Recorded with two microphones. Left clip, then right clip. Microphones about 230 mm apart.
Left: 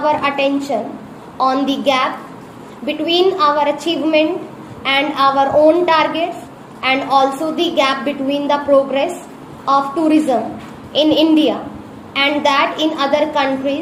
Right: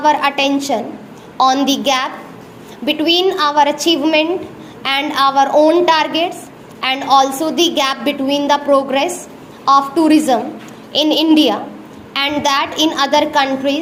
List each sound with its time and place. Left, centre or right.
0.0 s a woman's voice: right